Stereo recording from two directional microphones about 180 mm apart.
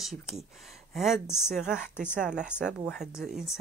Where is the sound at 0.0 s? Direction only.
Centre (ahead or behind).